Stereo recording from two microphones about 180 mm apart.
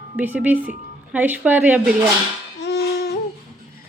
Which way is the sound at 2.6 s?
70° left (ahead or behind).